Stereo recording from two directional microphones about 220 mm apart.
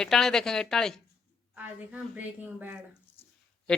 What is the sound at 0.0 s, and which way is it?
Speech, centre (ahead or behind).